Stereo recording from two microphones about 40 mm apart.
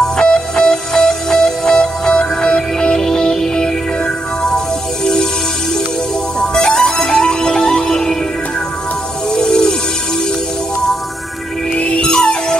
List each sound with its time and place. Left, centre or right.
0.0 s music: centre
6.4 s music: centre
9.3 s music: centre
11.7 s music: left
12.0 s music: left